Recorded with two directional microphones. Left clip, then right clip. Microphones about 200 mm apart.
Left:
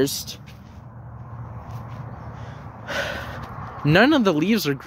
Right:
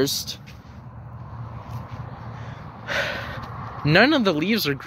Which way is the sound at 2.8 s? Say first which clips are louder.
Right 2 dB; 25° left (ahead or behind).